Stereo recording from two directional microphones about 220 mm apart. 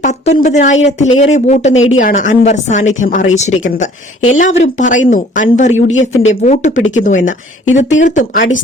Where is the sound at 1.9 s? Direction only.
35° left (ahead or behind).